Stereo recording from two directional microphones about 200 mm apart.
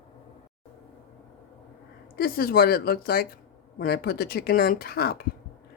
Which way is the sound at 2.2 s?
50° left (ahead or behind).